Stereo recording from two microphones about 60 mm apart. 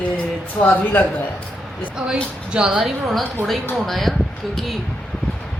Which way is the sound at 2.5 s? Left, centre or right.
Centre.